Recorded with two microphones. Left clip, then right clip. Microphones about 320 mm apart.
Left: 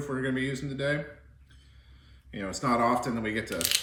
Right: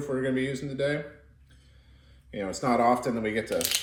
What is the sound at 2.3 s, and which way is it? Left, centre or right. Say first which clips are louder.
Speech: right 2 dB; right.